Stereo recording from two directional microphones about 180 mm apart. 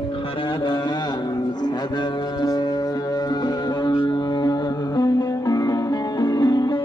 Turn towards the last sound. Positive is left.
turn(degrees=25)  # may be behind; listen again after turning